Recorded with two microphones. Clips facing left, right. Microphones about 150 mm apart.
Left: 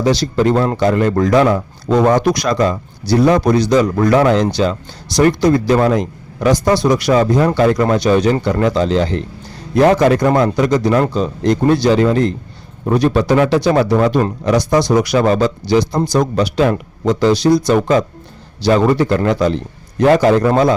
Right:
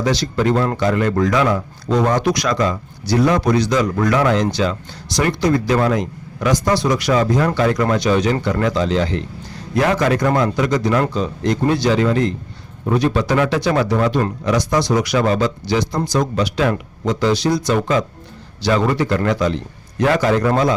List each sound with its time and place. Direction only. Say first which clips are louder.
0.0 s a man's voice: left 4 dB; 35° left (ahead or behind)